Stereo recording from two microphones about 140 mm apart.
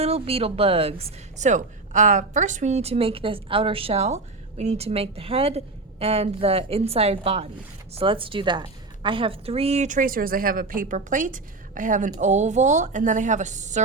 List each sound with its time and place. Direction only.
0.0 s a woman's voice: 45° right (ahead or behind); by 12.1 s 65° right (ahead or behind)
12.2 s speech: 55° right (ahead or behind)